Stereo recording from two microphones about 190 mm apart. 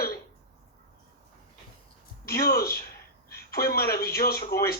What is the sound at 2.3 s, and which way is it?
Speech, 55° left (ahead or behind).